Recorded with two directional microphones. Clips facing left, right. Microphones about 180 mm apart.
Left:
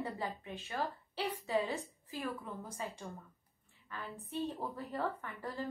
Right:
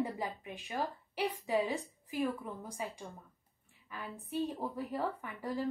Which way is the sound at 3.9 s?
10° right (ahead or behind).